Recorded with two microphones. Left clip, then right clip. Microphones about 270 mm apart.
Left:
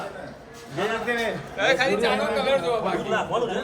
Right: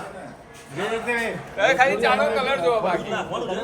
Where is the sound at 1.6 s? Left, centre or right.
Centre.